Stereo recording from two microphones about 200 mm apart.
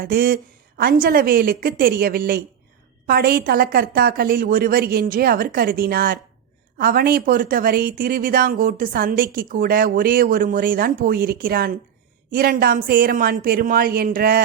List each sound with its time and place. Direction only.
0.0 s speech: 45° right (ahead or behind)